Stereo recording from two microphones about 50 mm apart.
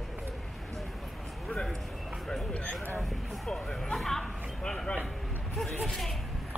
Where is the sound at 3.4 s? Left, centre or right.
Centre.